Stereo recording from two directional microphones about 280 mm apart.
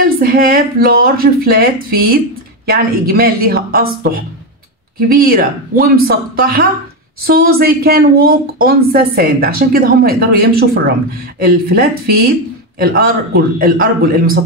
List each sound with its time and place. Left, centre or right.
0.2 s speech: right
5.2 s speech: right